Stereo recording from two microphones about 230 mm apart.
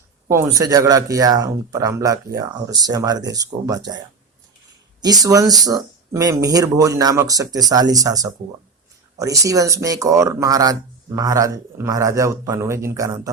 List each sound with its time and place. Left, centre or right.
0.3 s speech: centre